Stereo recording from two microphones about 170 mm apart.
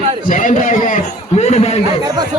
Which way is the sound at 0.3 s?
50° left (ahead or behind).